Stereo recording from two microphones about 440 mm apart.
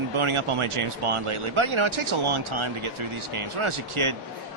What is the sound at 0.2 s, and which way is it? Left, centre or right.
Speech, right.